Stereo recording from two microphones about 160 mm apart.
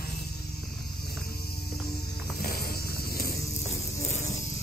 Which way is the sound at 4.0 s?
45° left (ahead or behind).